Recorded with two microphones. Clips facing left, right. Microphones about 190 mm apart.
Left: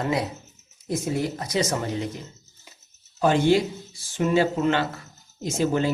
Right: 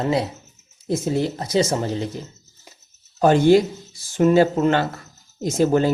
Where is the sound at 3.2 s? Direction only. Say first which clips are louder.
Right 5 dB; 45° right (ahead or behind).